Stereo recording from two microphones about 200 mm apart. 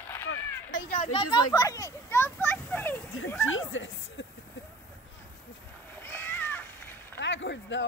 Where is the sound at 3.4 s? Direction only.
85° left.